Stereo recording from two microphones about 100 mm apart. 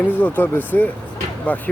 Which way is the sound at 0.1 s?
20° left (ahead or behind).